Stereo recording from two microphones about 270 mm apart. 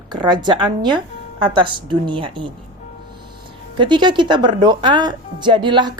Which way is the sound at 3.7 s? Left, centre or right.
Centre.